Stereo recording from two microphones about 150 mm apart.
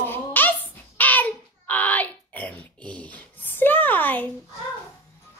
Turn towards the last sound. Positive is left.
turn(degrees=10)  # may be behind; listen again after turning